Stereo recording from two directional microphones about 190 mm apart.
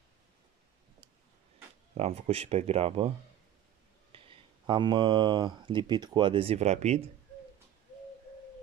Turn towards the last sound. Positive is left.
turn(degrees=-35)  # may be behind; listen again after turning